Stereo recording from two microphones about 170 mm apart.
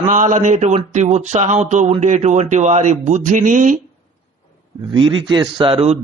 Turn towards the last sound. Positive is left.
turn(degrees=-30)  # may be behind; listen again after turning